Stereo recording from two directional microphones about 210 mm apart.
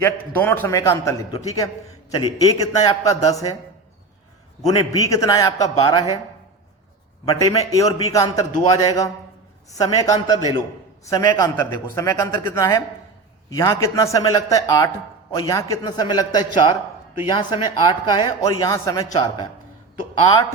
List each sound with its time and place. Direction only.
0.0 s a man's voice: 10° left (ahead or behind)
4.8 s a man's voice: 15° left (ahead or behind)
7.3 s a man's voice: 15° left (ahead or behind)